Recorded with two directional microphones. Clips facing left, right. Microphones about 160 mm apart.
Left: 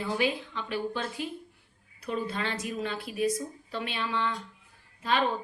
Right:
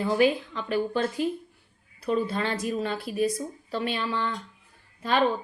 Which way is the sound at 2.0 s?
35° right (ahead or behind).